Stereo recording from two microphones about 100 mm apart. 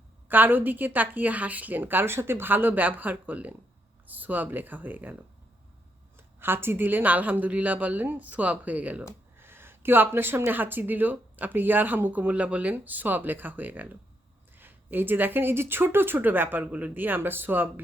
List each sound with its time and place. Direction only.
0.3 s speech: 20° right (ahead or behind)